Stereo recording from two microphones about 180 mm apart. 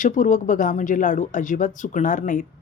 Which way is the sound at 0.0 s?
45° left (ahead or behind).